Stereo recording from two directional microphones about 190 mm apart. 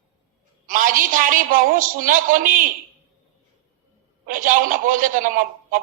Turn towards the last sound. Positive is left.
turn(degrees=-45)  # may be behind; listen again after turning